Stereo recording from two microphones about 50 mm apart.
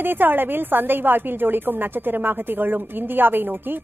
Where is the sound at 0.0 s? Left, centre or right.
Right.